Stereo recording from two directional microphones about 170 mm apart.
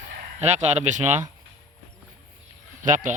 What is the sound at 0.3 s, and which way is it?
Speech, 40° right (ahead or behind).